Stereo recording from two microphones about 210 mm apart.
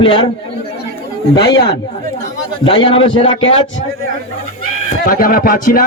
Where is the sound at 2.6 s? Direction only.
25° left (ahead or behind).